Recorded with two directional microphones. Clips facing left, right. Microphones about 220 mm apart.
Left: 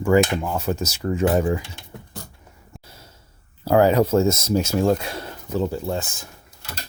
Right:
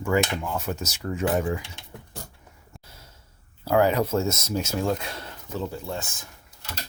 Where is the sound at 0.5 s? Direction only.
30° left (ahead or behind).